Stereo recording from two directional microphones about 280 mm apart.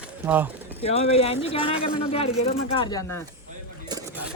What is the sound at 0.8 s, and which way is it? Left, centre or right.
A man's voice, left.